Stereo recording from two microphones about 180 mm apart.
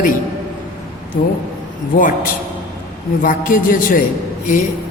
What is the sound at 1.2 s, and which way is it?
Speech, 45° left (ahead or behind).